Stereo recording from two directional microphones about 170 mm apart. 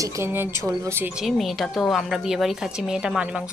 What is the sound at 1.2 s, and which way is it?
Speech, centre (ahead or behind).